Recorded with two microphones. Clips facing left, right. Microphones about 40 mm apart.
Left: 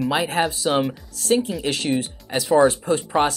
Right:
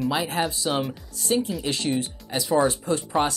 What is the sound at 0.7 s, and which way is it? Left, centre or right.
Speech, left.